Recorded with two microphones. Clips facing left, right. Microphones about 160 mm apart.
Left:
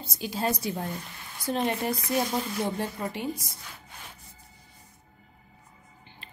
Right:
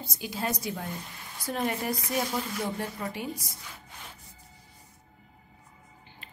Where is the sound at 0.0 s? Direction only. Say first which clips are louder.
Left 3 dB; 25° left (ahead or behind).